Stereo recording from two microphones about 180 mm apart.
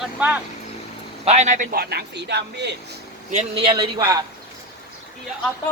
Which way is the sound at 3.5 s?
30° right (ahead or behind).